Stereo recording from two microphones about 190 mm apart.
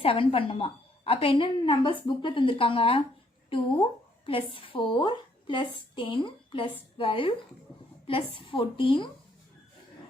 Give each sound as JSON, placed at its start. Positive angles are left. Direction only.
{"t": 0.0, "sound": "a woman's voice", "side_deg": 30}
{"t": 4.3, "sound": "a woman's voice", "side_deg": 30}